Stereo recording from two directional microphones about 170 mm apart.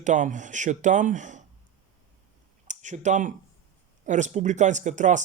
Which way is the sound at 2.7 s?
45° right (ahead or behind).